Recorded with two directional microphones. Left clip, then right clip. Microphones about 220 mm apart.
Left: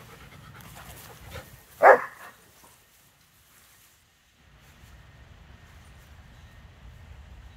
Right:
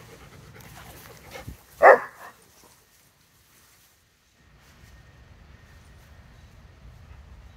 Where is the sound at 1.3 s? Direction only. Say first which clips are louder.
Right 3 dB; 30° right (ahead or behind).